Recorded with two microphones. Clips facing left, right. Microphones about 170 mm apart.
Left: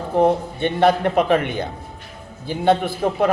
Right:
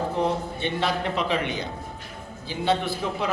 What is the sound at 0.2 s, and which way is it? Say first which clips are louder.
A man's voice: left 12 dB; 55° left (ahead or behind).